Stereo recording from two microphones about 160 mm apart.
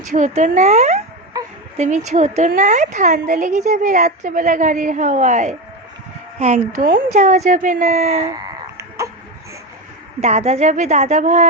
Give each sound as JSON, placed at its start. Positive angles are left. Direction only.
{"t": 0.0, "sound": "a woman's voice", "side_deg": -50}
{"t": 8.3, "sound": "a sound", "side_deg": -20}
{"t": 10.2, "sound": "a woman's voice", "side_deg": -45}